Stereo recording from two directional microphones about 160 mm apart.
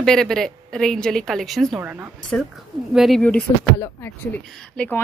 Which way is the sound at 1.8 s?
10° right (ahead or behind).